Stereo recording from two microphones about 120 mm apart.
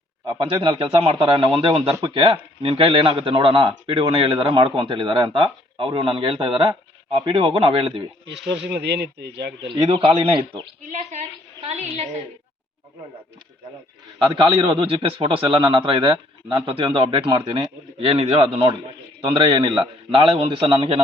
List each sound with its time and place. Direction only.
0.3 s a man's voice: 40° right (ahead or behind)
9.7 s a man's voice: 50° right (ahead or behind)
10.8 s a woman's voice: 80° right
11.7 s a woman's voice: 70° right (ahead or behind)
14.3 s a man's voice: 40° right (ahead or behind)